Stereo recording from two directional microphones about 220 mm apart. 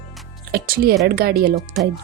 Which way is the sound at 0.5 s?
45° right (ahead or behind).